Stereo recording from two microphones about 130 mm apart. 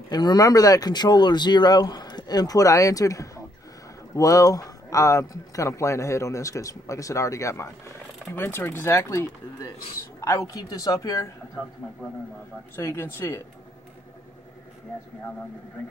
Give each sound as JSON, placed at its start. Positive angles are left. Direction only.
{"t": 0.1, "sound": "speech", "side_deg": 30}
{"t": 12.7, "sound": "speech", "side_deg": 20}